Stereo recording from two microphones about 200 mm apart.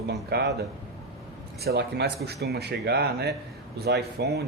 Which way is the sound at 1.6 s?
55° right (ahead or behind).